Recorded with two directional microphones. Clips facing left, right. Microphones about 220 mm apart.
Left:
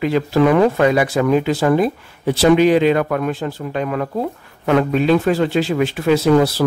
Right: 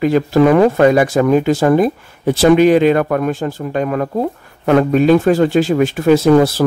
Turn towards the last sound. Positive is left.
turn(degrees=-50)  # may be behind; listen again after turning